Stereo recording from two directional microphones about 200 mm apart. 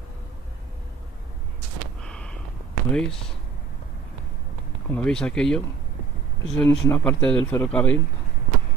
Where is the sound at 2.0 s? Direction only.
5° left (ahead or behind).